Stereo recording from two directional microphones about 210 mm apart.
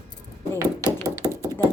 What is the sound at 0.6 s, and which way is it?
Knock, 15° right (ahead or behind).